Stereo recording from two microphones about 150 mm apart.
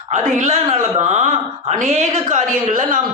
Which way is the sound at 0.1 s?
55° right (ahead or behind).